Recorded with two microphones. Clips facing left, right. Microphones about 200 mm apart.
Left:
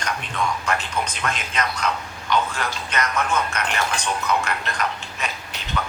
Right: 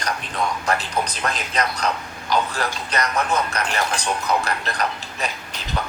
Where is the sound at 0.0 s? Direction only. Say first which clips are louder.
Right 1 dB; 35° right (ahead or behind).